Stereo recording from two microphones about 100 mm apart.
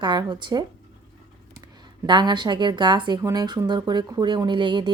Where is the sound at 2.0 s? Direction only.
50° right (ahead or behind).